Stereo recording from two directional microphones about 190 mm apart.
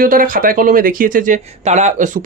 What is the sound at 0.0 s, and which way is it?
Speech, 50° right (ahead or behind).